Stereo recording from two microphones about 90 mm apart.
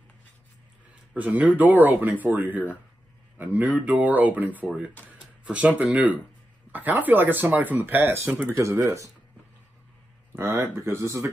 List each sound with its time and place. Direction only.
1.1 s speech: 15° right (ahead or behind)
8.5 s speech: 35° right (ahead or behind)
10.3 s speech: 30° right (ahead or behind)